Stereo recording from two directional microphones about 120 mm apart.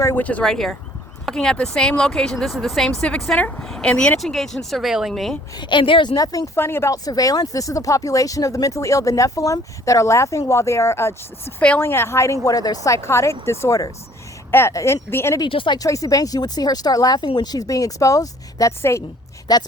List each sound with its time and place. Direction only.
0.0 s speech: 20° left (ahead or behind); by 5.4 s centre (ahead or behind)
5.5 s speech: 40° left (ahead or behind)
6.6 s speech: 20° left (ahead or behind)
15.4 s speech: 45° left (ahead or behind)
15.8 s speech: 30° left (ahead or behind)
19.5 s speech: 35° left (ahead or behind)